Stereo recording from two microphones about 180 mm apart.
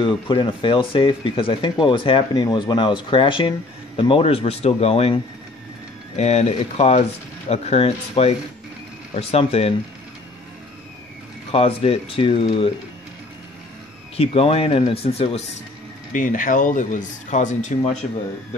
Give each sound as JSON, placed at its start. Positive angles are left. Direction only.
{"t": 0.0, "sound": "speech", "side_deg": 25}
{"t": 11.5, "sound": "speech", "side_deg": 30}
{"t": 14.1, "sound": "speech", "side_deg": 35}
{"t": 16.1, "sound": "speech", "side_deg": 45}